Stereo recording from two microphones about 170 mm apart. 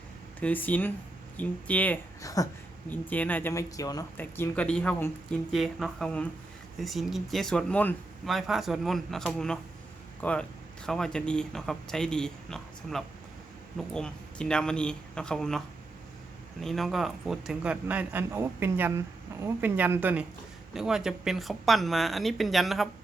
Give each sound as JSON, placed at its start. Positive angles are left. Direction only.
{"t": 0.3, "sound": "speech", "side_deg": 10}
{"t": 4.2, "sound": "speech", "side_deg": 10}